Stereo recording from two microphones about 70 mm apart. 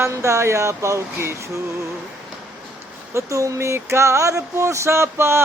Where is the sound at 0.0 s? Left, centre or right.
Right.